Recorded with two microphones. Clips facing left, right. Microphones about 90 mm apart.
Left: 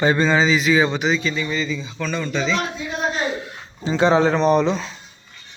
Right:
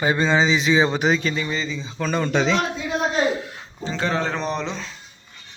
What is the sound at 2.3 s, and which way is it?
Speech, 65° right (ahead or behind).